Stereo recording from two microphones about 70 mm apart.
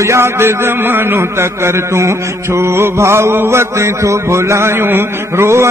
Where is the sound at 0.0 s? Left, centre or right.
Right.